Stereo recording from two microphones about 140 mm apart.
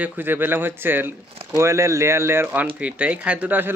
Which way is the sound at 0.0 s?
15° right (ahead or behind).